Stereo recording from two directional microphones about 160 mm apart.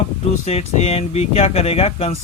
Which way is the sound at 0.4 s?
40° left (ahead or behind).